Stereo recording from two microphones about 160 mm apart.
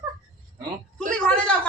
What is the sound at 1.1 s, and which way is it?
Speech, 5° left (ahead or behind).